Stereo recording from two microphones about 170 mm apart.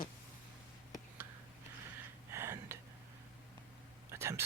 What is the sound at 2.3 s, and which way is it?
Gasp, 15° right (ahead or behind).